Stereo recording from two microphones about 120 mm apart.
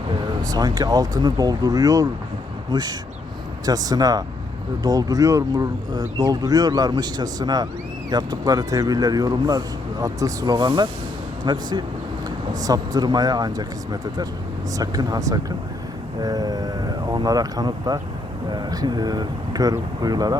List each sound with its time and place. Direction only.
0.4 s speech: 35° right (ahead or behind)